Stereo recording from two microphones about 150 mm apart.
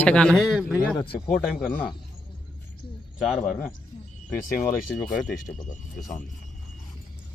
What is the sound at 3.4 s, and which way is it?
Speech, 15° left (ahead or behind).